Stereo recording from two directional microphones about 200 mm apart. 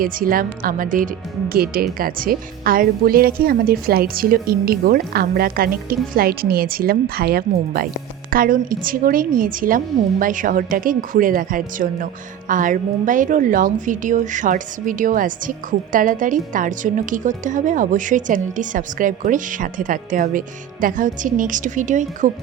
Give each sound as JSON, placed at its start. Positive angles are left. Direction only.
{"t": 0.0, "sound": "a woman's voice", "side_deg": -45}